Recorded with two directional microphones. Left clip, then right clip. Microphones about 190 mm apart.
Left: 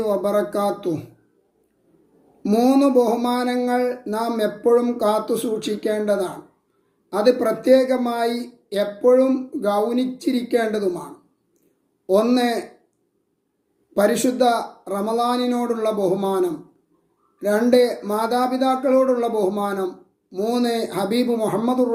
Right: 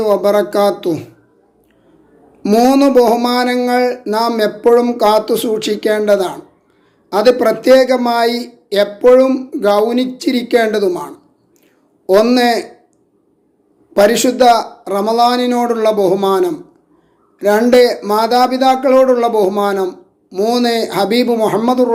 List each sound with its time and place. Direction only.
0.0 s speech: 10° left (ahead or behind)
2.4 s speech: 10° left (ahead or behind)
13.9 s speech: 10° left (ahead or behind)